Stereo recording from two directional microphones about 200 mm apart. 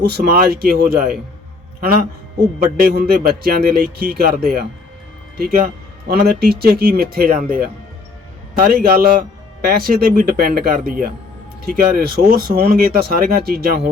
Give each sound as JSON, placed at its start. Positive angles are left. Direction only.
{"t": 0.0, "sound": "speech", "side_deg": -50}
{"t": 1.8, "sound": "speech", "side_deg": -45}